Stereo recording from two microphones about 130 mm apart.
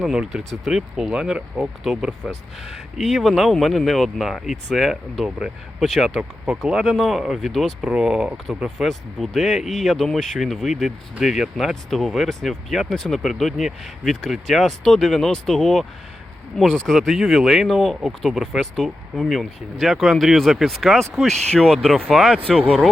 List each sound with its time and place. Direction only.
0.0 s speech: 5° right (ahead or behind)